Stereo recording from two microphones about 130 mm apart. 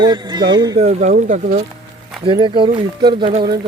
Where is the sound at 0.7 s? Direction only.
60° right (ahead or behind).